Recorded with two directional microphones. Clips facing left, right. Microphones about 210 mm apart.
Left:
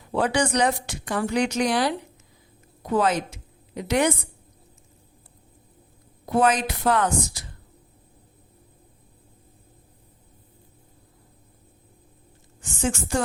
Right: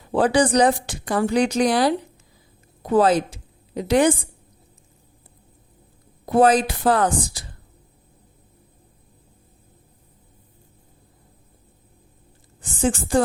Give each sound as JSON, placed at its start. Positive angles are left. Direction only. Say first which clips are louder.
{"t": 0.1, "sound": "a woman's voice", "louder": "right 5 dB", "side_deg": -35}
{"t": 6.2, "sound": "a woman's voice", "louder": "right 5 dB", "side_deg": -35}
{"t": 12.6, "sound": "a woman's voice", "louder": "right 4 dB", "side_deg": -35}